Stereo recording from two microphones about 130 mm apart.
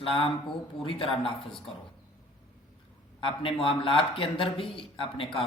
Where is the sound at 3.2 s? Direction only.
45° left (ahead or behind).